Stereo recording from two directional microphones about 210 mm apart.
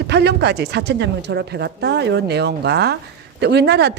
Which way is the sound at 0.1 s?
55° right (ahead or behind).